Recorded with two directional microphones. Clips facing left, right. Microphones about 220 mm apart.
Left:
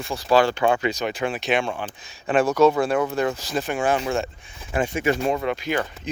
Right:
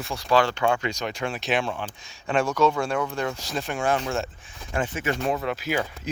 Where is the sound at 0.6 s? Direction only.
20° left (ahead or behind).